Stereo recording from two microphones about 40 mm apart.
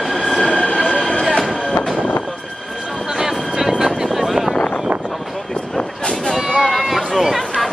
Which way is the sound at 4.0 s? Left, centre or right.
Centre.